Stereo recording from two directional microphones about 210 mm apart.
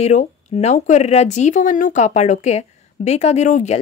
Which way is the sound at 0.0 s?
35° left (ahead or behind).